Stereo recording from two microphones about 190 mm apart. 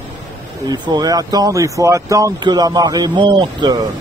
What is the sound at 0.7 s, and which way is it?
Speech, 20° right (ahead or behind).